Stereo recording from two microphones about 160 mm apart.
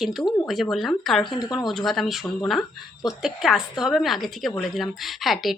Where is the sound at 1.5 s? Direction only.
Centre (ahead or behind).